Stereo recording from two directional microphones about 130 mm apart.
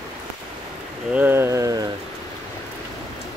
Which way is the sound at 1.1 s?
15° right (ahead or behind).